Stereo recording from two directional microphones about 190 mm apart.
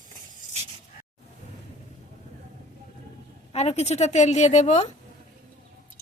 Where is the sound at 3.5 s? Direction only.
35° left (ahead or behind).